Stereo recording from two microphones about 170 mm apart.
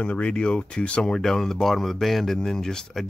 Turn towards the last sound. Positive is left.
turn(degrees=5)  # may be behind; listen again after turning